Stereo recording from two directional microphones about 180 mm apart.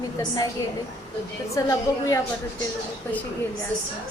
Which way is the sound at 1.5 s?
20° left (ahead or behind).